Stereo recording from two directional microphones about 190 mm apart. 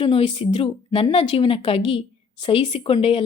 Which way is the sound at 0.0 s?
30° left (ahead or behind).